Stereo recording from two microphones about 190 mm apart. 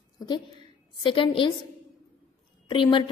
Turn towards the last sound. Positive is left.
turn(degrees=25)  # may be behind; listen again after turning